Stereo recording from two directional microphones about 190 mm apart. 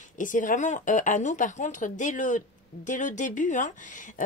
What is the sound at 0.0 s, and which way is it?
A woman's voice, 45° left (ahead or behind).